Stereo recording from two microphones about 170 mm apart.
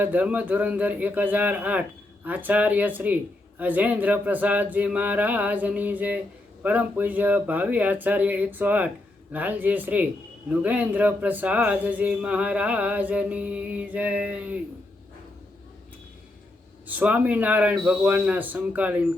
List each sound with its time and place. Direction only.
0.0 s speech: 10° right (ahead or behind)
16.8 s speech: 10° right (ahead or behind)